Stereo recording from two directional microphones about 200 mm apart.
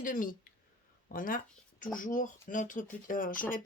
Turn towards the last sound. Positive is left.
turn(degrees=45)  # may be behind; listen again after turning